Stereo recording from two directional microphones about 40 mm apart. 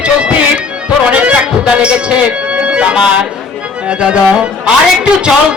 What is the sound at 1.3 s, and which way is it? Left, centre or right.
Speech, right.